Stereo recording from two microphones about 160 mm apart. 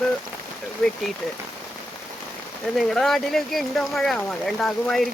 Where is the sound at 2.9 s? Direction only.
Centre (ahead or behind).